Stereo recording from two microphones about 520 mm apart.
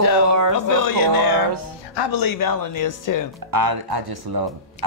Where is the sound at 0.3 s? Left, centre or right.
Right.